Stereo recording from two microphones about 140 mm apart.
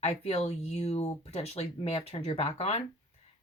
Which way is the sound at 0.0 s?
50° left (ahead or behind).